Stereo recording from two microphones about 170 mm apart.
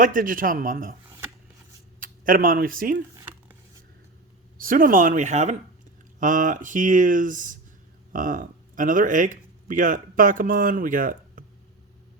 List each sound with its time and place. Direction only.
0.0 s speech: 55° right (ahead or behind)
1.0 s a sound: 15° right (ahead or behind)
2.0 s speech: 55° right (ahead or behind)
4.5 s speech: 55° right (ahead or behind)